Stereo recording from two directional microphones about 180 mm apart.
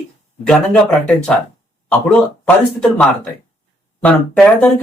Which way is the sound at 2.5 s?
5° left (ahead or behind).